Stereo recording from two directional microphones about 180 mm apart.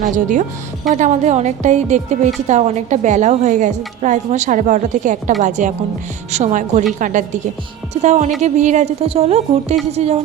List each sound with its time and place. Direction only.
0.0 s a woman's voice: 45° right (ahead or behind)